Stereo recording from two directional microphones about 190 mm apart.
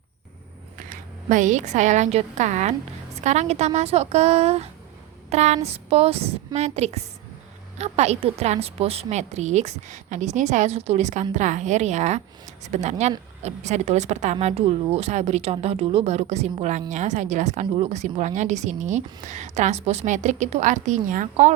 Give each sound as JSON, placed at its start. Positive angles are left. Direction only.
{"t": 0.9, "sound": "a woman's voice", "side_deg": -40}